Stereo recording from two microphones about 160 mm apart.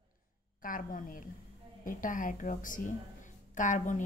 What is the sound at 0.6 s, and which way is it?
A woman's voice, 55° left (ahead or behind).